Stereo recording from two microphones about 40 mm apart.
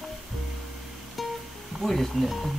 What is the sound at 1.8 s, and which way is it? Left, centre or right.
Speech, centre.